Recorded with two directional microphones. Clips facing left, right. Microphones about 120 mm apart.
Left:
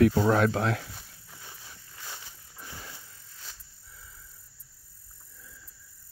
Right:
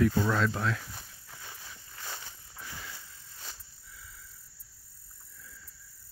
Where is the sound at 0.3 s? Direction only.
65° left (ahead or behind).